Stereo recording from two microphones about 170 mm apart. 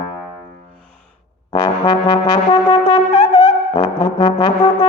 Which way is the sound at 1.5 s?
25° left (ahead or behind).